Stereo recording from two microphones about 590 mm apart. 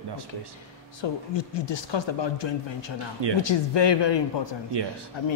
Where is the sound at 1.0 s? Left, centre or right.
Left.